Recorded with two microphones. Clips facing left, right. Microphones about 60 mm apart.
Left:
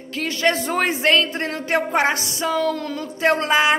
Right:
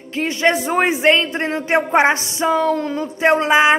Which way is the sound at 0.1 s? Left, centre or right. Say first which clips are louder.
Right 3 dB; right.